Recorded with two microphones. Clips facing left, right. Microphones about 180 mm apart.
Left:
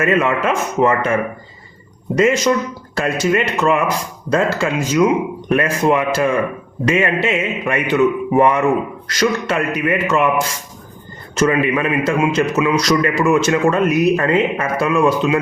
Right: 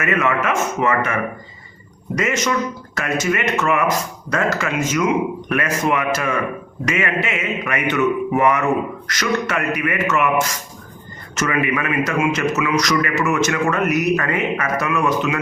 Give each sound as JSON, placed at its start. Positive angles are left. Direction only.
{"t": 0.0, "sound": "a man's voice", "side_deg": 30}